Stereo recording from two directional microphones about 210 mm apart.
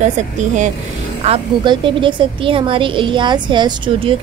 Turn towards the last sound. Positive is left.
turn(degrees=-20)  # may be behind; listen again after turning